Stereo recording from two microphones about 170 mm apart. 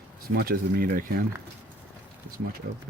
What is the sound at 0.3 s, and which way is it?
Speech, 60° right (ahead or behind).